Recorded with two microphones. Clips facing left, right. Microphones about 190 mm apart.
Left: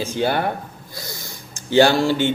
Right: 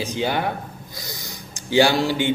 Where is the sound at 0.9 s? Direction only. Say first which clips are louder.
Left 3 dB; 20° right (ahead or behind).